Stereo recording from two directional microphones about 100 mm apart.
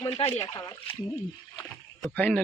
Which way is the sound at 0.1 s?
80° left.